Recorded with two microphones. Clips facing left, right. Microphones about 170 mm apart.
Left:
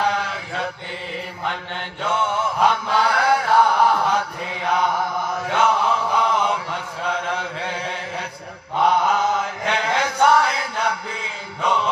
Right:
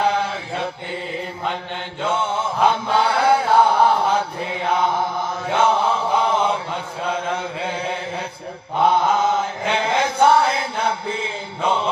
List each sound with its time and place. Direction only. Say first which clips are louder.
0.1 s chant: right 3 dB; 25° right (ahead or behind)
2.0 s mantra: even; 25° right (ahead or behind)
2.6 s chant: right 2 dB; 25° right (ahead or behind)